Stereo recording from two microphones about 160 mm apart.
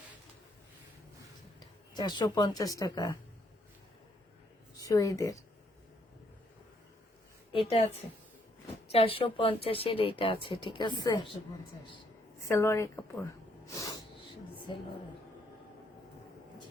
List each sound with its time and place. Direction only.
1.5 s speech: 25° left (ahead or behind)
4.8 s speech: 20° left (ahead or behind)
7.5 s a woman's voice: 35° left (ahead or behind)
12.5 s a woman's voice: 15° left (ahead or behind)